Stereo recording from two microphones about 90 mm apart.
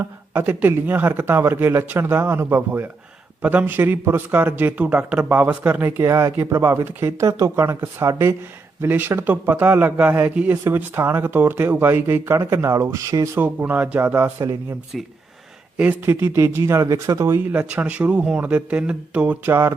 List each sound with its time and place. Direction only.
0.0 s speech: 25° right (ahead or behind)
6.1 s speech: 35° right (ahead or behind)
13.4 s speech: 20° right (ahead or behind)
14.9 s speech: centre (ahead or behind)
15.8 s speech: 20° right (ahead or behind); by 17.3 s 40° right (ahead or behind)
17.3 s speech: 15° right (ahead or behind)
19.5 s speech: 30° right (ahead or behind)